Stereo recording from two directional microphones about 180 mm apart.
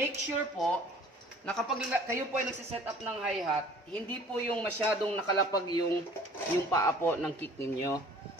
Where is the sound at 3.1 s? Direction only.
5° right (ahead or behind).